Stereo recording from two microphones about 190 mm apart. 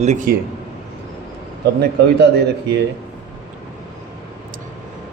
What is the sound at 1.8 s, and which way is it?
Speech, 60° right (ahead or behind).